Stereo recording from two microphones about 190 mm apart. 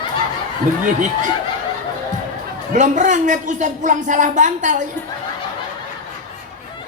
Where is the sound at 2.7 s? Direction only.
40° right (ahead or behind).